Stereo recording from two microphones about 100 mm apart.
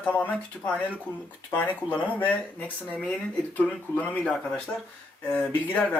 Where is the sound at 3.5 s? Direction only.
15° left (ahead or behind).